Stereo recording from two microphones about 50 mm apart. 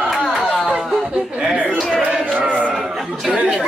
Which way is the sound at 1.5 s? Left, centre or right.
Right.